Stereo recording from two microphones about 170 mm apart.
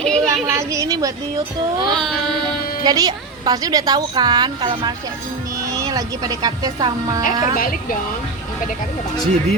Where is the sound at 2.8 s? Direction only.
20° right (ahead or behind).